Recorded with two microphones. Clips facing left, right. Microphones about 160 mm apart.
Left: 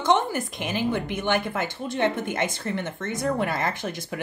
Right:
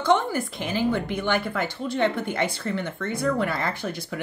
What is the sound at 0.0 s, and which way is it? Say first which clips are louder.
Speech: right 1 dB; 20° left (ahead or behind).